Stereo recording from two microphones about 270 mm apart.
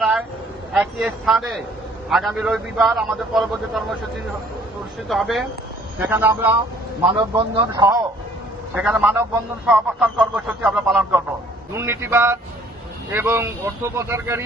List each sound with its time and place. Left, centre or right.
0.0 s a sound: centre
0.7 s a man's voice: centre
5.0 s a man's voice: centre
7.1 s speech: centre
8.7 s a man's voice: centre